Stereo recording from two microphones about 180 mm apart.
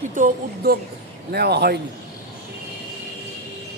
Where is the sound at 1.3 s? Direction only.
65° right (ahead or behind).